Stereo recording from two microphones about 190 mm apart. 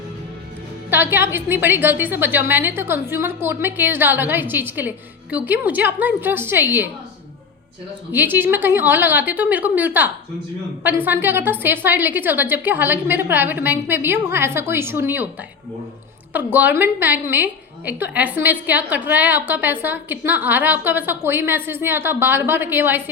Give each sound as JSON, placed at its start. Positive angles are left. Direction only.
{"t": 0.9, "sound": "a woman's voice", "side_deg": -10}
{"t": 8.1, "sound": "a woman's voice", "side_deg": -10}